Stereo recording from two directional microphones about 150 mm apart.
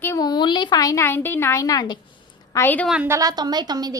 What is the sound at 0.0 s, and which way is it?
A woman's voice, 20° left (ahead or behind).